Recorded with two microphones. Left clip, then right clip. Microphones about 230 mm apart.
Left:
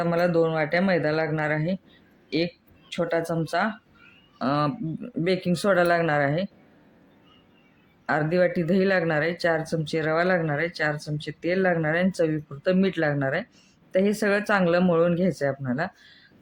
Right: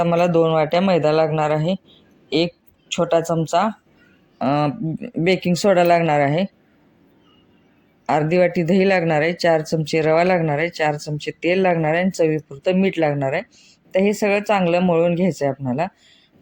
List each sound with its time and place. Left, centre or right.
0.0 s speech: right
2.9 s speech: right
8.0 s speech: right